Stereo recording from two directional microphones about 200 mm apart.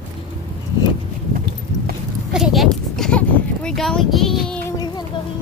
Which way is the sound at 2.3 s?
Centre (ahead or behind).